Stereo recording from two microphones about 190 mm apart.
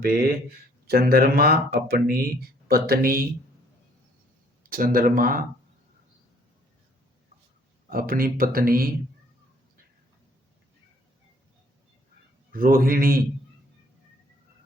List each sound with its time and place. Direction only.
0.0 s speech: 50° right (ahead or behind)
4.7 s speech: 50° right (ahead or behind)
7.9 s speech: 50° right (ahead or behind)
12.5 s speech: 45° right (ahead or behind)